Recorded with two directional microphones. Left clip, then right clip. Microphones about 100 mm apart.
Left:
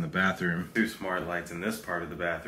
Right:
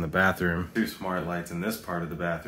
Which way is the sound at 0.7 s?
20° right (ahead or behind).